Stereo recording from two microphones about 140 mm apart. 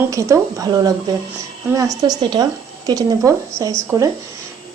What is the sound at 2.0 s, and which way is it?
A woman's voice, 30° right (ahead or behind).